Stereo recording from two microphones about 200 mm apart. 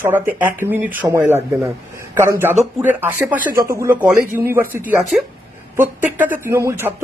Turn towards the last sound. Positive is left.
turn(degrees=-10)  # may be behind; listen again after turning